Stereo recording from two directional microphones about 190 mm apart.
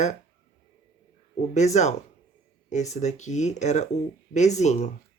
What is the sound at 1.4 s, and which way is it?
Speech, 40° left (ahead or behind).